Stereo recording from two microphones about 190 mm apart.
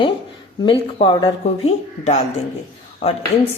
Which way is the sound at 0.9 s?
30° left (ahead or behind).